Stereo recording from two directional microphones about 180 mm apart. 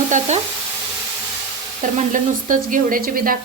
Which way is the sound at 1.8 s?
45° right (ahead or behind).